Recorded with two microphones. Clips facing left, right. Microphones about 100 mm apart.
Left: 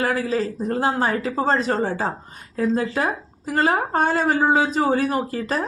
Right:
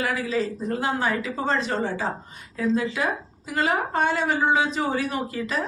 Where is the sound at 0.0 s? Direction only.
45° left (ahead or behind).